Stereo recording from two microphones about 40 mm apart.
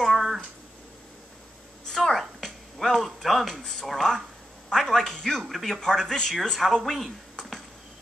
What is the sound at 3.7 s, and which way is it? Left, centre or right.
A man's voice, centre.